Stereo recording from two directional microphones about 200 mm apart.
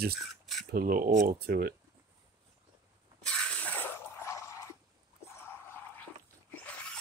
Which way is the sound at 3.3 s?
5° left (ahead or behind).